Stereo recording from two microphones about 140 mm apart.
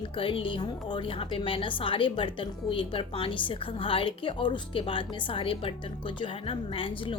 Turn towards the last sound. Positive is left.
turn(degrees=40)  # may be behind; listen again after turning